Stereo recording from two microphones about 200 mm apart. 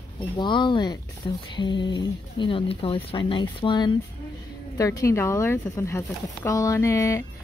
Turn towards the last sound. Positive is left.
turn(degrees=15)  # may be behind; listen again after turning